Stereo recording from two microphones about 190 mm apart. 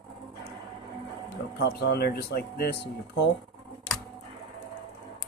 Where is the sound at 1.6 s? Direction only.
60° left (ahead or behind).